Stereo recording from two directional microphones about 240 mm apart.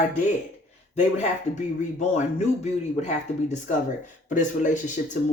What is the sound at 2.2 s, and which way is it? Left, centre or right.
A man's voice, left.